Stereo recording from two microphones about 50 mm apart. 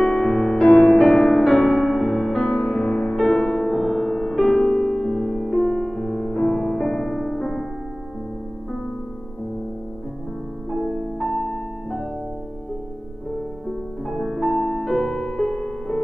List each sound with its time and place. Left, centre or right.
0.0 s music: centre
0.9 s music: left
1.3 s music: centre
10.7 s music: centre
13.7 s music: centre
14.6 s music: centre
14.9 s music: centre